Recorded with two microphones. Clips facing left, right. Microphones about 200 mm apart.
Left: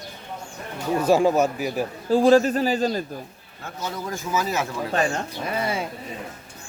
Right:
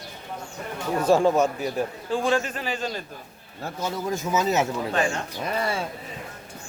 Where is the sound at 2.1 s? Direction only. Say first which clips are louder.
Left 9 dB; 35° left (ahead or behind).